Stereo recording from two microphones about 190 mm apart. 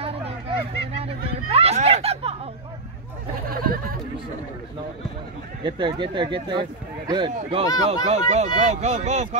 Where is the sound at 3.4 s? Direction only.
50° right (ahead or behind).